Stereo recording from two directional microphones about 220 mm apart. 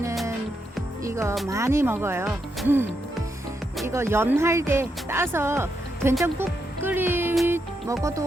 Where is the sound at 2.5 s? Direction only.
10° right (ahead or behind).